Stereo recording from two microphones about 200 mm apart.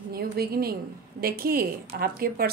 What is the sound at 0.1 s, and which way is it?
A woman's voice, 50° right (ahead or behind).